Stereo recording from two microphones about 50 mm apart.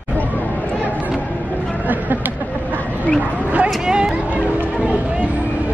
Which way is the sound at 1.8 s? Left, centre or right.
Right.